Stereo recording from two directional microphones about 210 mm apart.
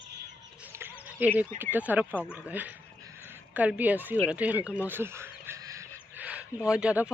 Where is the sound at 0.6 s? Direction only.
10° right (ahead or behind).